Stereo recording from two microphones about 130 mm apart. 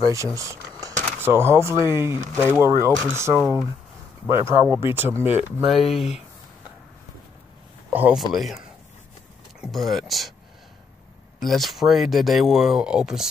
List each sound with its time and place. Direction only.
0.1 s speech: 25° right (ahead or behind)
5.7 s speech: centre (ahead or behind)
7.9 s speech: 15° right (ahead or behind)
8.3 s speech: centre (ahead or behind)
11.3 s speech: centre (ahead or behind)